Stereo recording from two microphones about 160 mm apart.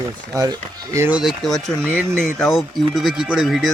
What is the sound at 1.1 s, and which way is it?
Speech, centre (ahead or behind).